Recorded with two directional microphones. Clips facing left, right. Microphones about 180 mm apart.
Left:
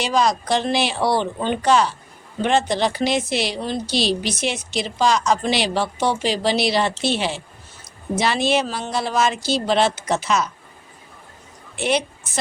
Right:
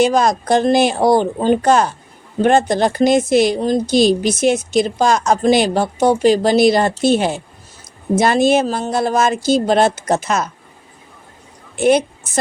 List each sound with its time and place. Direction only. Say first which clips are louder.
0.0 s a woman's voice: right 6 dB; 50° right (ahead or behind)
11.8 s a woman's voice: right 8 dB; 45° right (ahead or behind)